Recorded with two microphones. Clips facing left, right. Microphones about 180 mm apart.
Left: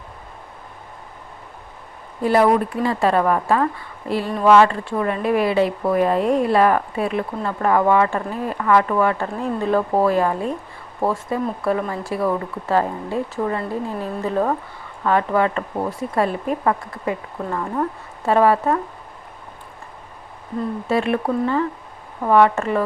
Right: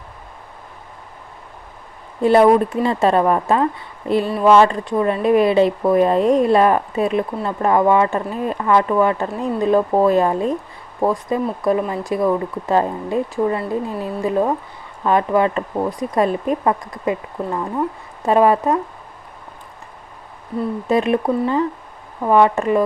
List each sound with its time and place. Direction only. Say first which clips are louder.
2.2 s speech: right 4 dB; 25° right (ahead or behind)
20.8 s speech: right 3 dB; 20° right (ahead or behind)